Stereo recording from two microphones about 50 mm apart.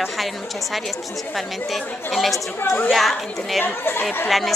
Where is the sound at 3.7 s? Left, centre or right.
Left.